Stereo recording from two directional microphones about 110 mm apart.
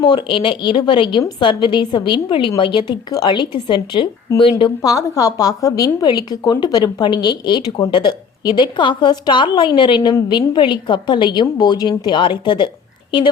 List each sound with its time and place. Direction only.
0.0 s a woman's voice: 45° left (ahead or behind)
4.8 s a woman's voice: 30° left (ahead or behind)